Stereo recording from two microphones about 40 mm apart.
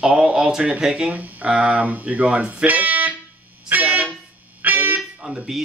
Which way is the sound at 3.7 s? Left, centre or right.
Right.